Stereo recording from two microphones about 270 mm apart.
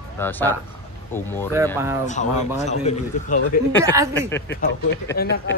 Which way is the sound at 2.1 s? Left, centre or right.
Left.